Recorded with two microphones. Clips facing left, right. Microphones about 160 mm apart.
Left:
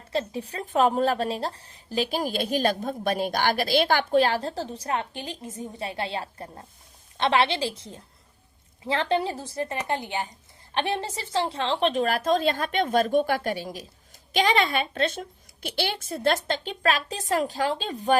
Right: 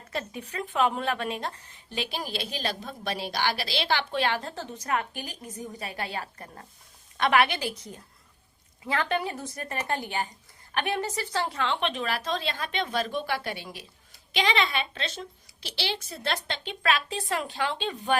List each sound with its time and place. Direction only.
0.1 s a woman's voice: 30° left (ahead or behind)